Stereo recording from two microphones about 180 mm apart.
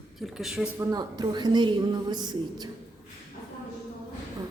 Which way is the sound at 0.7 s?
20° right (ahead or behind).